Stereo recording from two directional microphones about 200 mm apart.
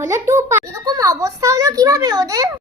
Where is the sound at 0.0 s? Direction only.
15° right (ahead or behind).